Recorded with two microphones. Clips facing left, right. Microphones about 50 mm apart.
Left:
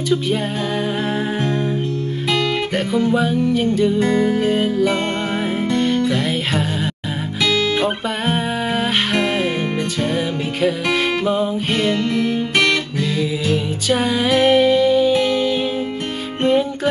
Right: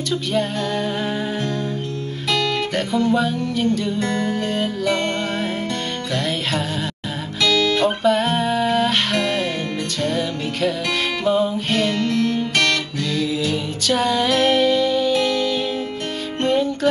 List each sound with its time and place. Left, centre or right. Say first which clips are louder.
2.9 s music: left 2 dB; centre
7.4 s music: right 1 dB; centre
11.2 s music: even; centre